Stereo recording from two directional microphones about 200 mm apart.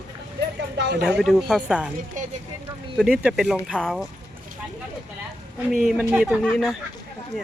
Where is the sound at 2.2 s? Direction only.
40° right (ahead or behind).